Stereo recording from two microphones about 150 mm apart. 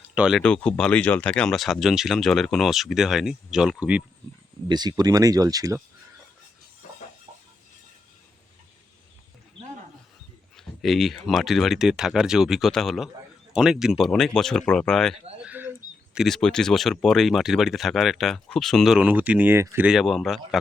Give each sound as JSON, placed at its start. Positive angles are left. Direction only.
{"t": 0.1, "sound": "speech", "side_deg": -5}
{"t": 4.7, "sound": "speech", "side_deg": -25}
{"t": 10.6, "sound": "speech", "side_deg": 0}
{"t": 15.4, "sound": "a sound", "side_deg": -10}
{"t": 16.1, "sound": "speech", "side_deg": 0}